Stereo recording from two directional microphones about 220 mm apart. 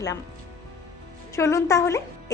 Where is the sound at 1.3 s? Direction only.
15° left (ahead or behind).